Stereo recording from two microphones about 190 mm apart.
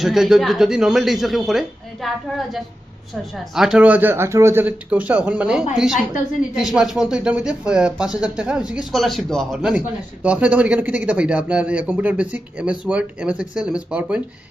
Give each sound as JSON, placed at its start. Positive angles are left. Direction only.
{"t": 0.0, "sound": "speech", "side_deg": 0}
{"t": 3.5, "sound": "a man's voice", "side_deg": 0}